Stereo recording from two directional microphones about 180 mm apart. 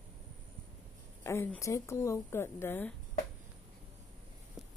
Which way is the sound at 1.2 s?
15° left (ahead or behind).